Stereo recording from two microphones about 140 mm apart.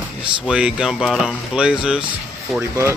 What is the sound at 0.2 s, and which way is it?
Speech, 5° right (ahead or behind).